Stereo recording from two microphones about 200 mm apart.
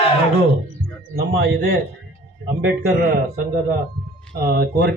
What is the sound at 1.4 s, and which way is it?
Speech, 55° right (ahead or behind).